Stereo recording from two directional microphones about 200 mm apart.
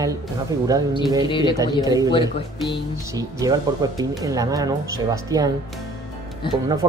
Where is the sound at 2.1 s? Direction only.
25° left (ahead or behind).